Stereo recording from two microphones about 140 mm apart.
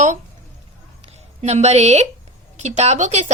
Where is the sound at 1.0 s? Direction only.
55° right (ahead or behind).